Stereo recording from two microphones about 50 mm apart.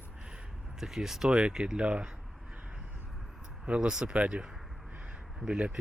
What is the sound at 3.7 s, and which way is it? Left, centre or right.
Speech, centre.